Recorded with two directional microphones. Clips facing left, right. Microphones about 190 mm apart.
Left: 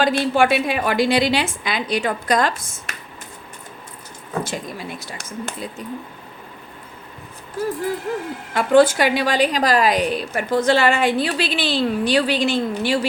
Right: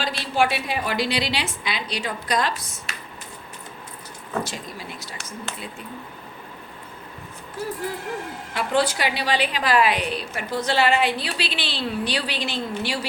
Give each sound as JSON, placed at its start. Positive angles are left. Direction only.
{"t": 0.0, "sound": "a woman's voice", "side_deg": 50}
{"t": 4.4, "sound": "a woman's voice", "side_deg": 50}
{"t": 8.5, "sound": "a woman's voice", "side_deg": 50}